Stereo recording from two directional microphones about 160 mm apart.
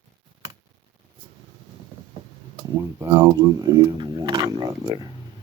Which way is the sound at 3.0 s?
20° right (ahead or behind).